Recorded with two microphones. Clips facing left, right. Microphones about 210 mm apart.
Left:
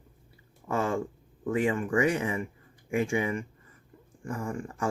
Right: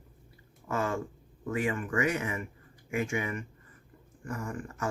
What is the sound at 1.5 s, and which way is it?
Speech, 30° left (ahead or behind).